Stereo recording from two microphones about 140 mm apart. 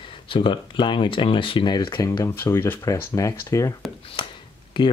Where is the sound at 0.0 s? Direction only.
35° left (ahead or behind).